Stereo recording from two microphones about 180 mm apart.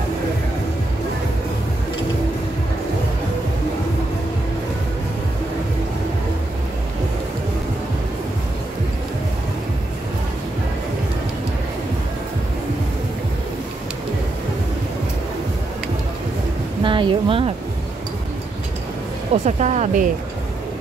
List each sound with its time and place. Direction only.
16.8 s a woman's voice: 30° right (ahead or behind)
19.3 s speech: 40° right (ahead or behind)